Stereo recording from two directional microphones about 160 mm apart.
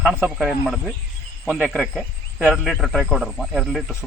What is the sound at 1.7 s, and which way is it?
Speech, centre (ahead or behind).